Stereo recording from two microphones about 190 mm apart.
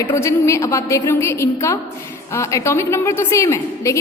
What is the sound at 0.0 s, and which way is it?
A woman's voice, 15° left (ahead or behind).